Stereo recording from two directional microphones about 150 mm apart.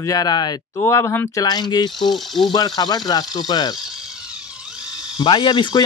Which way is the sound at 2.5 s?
25° left (ahead or behind).